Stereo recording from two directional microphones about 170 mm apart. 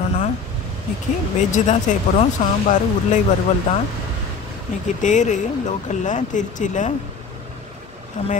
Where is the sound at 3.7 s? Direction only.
45° left (ahead or behind).